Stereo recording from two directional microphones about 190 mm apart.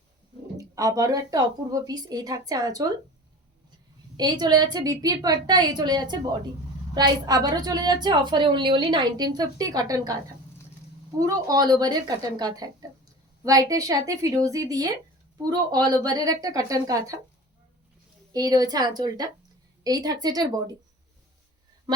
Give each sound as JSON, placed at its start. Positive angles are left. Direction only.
{"t": 0.5, "sound": "a sound", "side_deg": -15}
{"t": 0.9, "sound": "a woman's voice", "side_deg": -20}
{"t": 4.2, "sound": "a woman's voice", "side_deg": -20}
{"t": 11.4, "sound": "a woman's voice", "side_deg": -20}
{"t": 18.3, "sound": "a woman's voice", "side_deg": -20}